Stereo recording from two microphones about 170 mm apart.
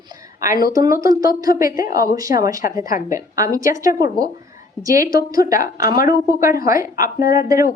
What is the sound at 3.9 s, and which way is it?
Speech, 55° left (ahead or behind).